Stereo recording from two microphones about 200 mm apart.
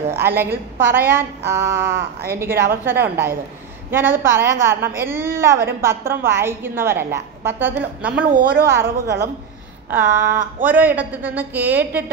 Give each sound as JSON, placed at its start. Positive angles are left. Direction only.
{"t": 0.1, "sound": "a woman's voice", "side_deg": -10}
{"t": 8.3, "sound": "a woman's voice", "side_deg": -45}
{"t": 8.6, "sound": "a woman's voice", "side_deg": -15}